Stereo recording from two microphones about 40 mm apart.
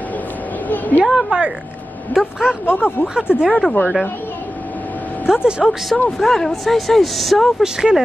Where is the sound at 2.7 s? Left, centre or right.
Left.